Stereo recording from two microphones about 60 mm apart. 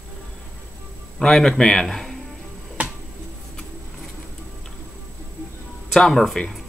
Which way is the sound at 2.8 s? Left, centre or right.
Right.